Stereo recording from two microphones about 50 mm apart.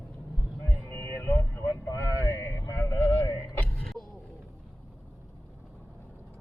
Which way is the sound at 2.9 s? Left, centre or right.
Left.